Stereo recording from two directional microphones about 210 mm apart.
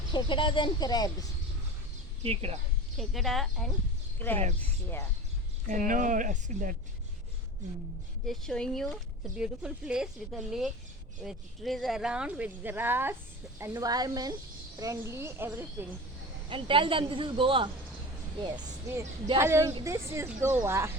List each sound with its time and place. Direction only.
0.1 s speech: 20° left (ahead or behind)
2.2 s a woman's voice: 30° right (ahead or behind)
3.0 s speech: centre (ahead or behind)
5.6 s speech: 40° right (ahead or behind)
8.3 s a woman's voice: 5° left (ahead or behind)
16.5 s a woman's voice: 25° right (ahead or behind)
19.0 s speech: 35° right (ahead or behind)
19.4 s a woman's voice: 15° right (ahead or behind)